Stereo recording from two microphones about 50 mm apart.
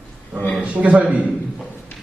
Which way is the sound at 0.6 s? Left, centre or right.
Right.